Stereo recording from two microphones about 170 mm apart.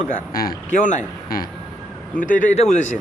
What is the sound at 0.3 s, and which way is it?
Speech, 55° left (ahead or behind).